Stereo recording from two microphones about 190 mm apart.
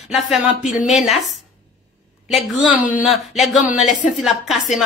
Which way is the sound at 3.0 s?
Centre (ahead or behind).